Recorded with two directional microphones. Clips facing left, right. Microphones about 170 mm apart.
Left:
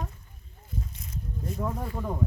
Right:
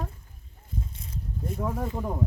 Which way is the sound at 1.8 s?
20° right (ahead or behind).